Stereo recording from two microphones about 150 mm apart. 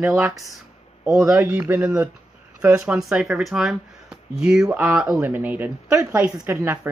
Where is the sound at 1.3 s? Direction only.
10° right (ahead or behind).